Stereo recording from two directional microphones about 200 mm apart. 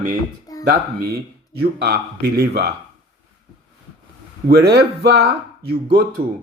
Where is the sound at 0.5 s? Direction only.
15° left (ahead or behind).